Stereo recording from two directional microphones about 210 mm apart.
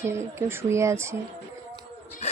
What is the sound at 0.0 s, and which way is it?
Speech, 10° right (ahead or behind).